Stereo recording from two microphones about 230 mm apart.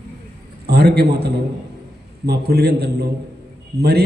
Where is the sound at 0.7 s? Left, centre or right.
Right.